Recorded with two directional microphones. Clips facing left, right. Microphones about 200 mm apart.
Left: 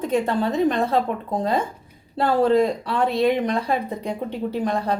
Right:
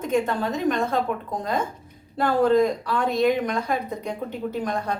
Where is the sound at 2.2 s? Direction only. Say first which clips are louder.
Left 1 dB; 30° left (ahead or behind).